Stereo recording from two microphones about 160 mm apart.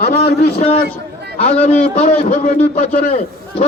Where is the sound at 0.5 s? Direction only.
40° left (ahead or behind).